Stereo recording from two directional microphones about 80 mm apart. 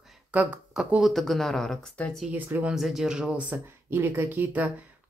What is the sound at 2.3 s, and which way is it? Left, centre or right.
Speech, right.